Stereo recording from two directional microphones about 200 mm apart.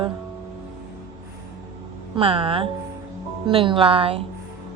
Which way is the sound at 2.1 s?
25° right (ahead or behind).